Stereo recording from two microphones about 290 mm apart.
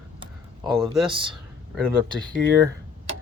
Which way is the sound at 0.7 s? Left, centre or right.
Centre.